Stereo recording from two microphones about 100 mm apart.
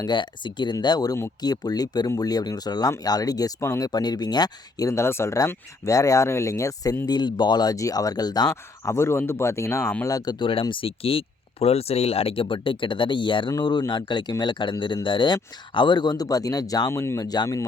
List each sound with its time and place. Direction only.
0.0 s speech: 50° left (ahead or behind)
8.9 s speech: 25° left (ahead or behind)
10.3 s speech: 55° left (ahead or behind)
12.5 s speech: 55° left (ahead or behind)
13.5 s speech: 45° left (ahead or behind)
16.9 s speech: 25° left (ahead or behind)
17.2 s speech: 40° left (ahead or behind)